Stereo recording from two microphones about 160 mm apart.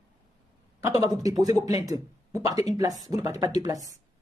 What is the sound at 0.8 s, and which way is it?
Speech, 20° right (ahead or behind).